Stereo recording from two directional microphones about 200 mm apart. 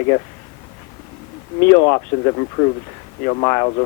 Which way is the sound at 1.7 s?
20° left (ahead or behind).